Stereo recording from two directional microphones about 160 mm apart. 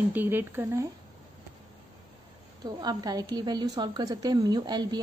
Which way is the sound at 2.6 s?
25° right (ahead or behind).